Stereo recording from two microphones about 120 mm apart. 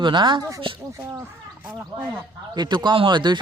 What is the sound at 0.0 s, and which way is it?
Speech, 40° right (ahead or behind).